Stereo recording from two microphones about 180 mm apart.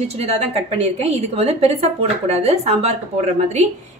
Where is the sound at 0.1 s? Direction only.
35° right (ahead or behind).